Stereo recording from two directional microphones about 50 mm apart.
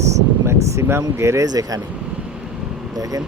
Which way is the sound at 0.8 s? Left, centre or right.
Right.